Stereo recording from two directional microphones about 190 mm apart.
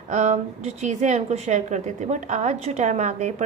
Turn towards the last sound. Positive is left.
turn(degrees=-40)  # may be behind; listen again after turning